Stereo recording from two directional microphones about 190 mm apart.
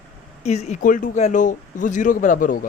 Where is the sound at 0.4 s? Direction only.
35° left (ahead or behind).